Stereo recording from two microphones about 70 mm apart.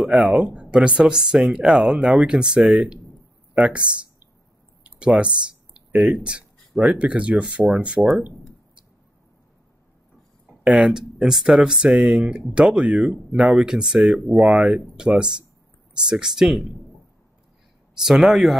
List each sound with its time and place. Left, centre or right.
0.0 s speech: centre
4.8 s computer keyboard: centre
6.0 s speech: centre
10.6 s speech: centre
14.4 s speech: centre
18.0 s speech: centre